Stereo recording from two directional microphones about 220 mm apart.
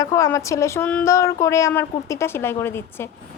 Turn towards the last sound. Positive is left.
turn(degrees=10)  # may be behind; listen again after turning